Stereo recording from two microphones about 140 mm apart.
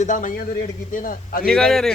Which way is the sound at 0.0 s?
65° left (ahead or behind).